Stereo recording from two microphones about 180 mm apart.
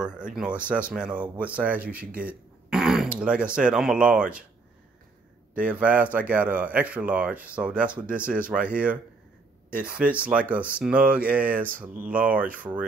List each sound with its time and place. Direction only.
0.0 s speech: 5° right (ahead or behind)
5.6 s speech: 5° right (ahead or behind)
9.8 s speech: 5° right (ahead or behind)